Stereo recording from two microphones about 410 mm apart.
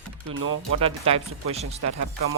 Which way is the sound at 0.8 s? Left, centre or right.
Centre.